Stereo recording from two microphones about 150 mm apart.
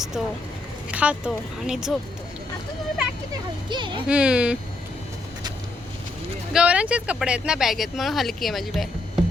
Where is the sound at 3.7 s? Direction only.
30° right (ahead or behind).